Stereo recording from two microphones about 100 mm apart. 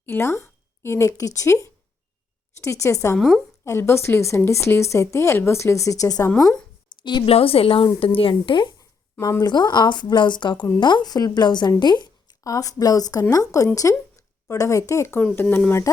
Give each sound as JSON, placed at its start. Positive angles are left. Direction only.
{"t": 0.0, "sound": "speech", "side_deg": 25}
{"t": 3.2, "sound": "a woman's voice", "side_deg": 0}
{"t": 3.6, "sound": "speech", "side_deg": 25}
{"t": 6.3, "sound": "speech", "side_deg": 10}
{"t": 7.0, "sound": "a woman's voice", "side_deg": 50}
{"t": 7.3, "sound": "a woman's voice", "side_deg": 75}
{"t": 15.2, "sound": "speech", "side_deg": 15}